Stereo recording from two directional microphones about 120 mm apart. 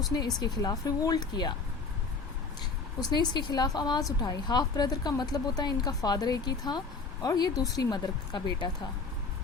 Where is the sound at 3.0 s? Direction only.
40° left (ahead or behind).